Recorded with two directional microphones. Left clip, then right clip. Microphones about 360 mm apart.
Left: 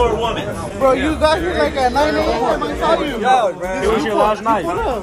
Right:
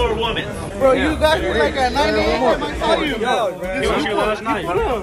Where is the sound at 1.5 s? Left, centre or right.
Centre.